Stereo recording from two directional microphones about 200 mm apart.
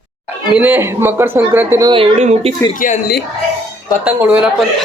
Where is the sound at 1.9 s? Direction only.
30° right (ahead or behind).